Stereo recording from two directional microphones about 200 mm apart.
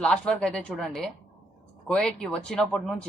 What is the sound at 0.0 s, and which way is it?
Speech, 5° left (ahead or behind).